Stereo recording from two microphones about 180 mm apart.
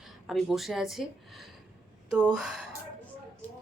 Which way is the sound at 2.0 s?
5° right (ahead or behind).